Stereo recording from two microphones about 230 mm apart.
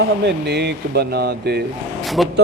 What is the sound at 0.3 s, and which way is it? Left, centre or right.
A man's voice, right.